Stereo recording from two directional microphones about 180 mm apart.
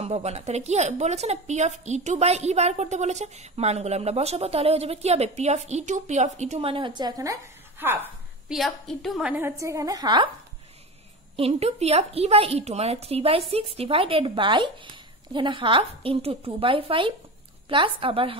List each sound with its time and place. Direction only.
0.0 s a woman's voice: 35° right (ahead or behind); by 7.3 s 20° right (ahead or behind)
7.8 s a sound: 10° right (ahead or behind)
8.5 s a woman's voice: centre (ahead or behind); by 10.3 s 25° right (ahead or behind)
11.3 s a woman's voice: 35° right (ahead or behind)